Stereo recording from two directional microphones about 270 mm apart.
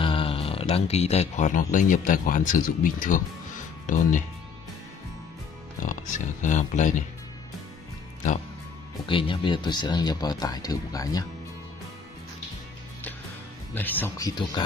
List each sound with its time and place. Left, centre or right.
0.0 s speech: centre
5.8 s speech: left
9.0 s speech: centre
13.7 s speech: centre